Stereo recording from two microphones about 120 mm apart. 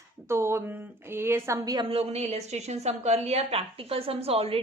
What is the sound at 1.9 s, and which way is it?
A woman's voice, 60° right (ahead or behind).